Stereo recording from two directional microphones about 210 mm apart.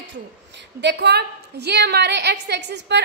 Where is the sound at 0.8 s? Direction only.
55° right (ahead or behind).